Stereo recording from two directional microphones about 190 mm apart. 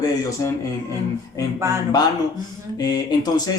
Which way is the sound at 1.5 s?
15° right (ahead or behind).